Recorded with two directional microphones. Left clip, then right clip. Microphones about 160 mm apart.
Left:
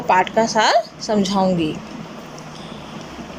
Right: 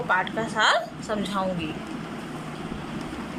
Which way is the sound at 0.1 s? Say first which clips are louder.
Left 10 dB; 45° left (ahead or behind).